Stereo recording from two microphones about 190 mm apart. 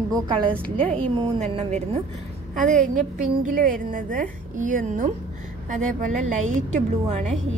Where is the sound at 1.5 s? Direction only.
35° right (ahead or behind).